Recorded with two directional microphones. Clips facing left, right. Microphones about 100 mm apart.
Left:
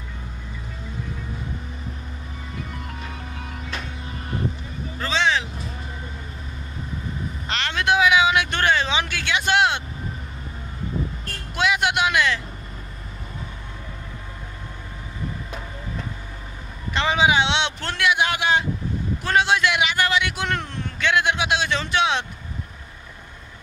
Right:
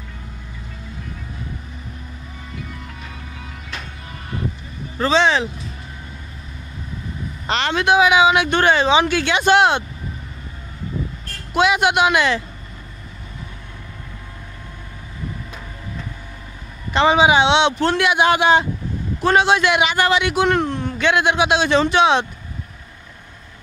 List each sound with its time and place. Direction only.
4.9 s vehicle: 35° right (ahead or behind)
7.4 s a man's voice: 20° right (ahead or behind)
11.5 s a man's voice: 20° right (ahead or behind)
16.9 s a man's voice: 20° right (ahead or behind)